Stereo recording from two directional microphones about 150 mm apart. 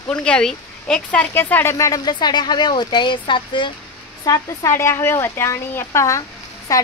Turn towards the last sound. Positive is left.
turn(degrees=20)  # may be behind; listen again after turning